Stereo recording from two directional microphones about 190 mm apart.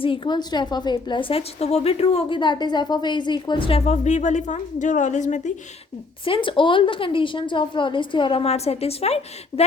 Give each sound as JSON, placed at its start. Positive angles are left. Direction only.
{"t": 0.0, "sound": "a woman's voice", "side_deg": 25}
{"t": 6.2, "sound": "a woman's voice", "side_deg": 25}